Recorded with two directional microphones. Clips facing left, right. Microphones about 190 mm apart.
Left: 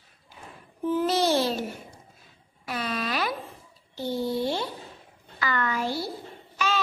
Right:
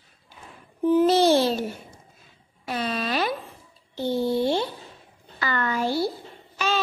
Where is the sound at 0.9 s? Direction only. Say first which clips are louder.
Right 6 dB; 25° right (ahead or behind).